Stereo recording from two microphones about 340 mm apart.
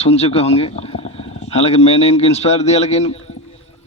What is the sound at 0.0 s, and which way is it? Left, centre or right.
Speech, centre.